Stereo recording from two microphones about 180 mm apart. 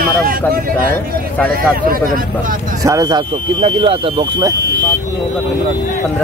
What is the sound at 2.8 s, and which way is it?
Speech, 20° right (ahead or behind).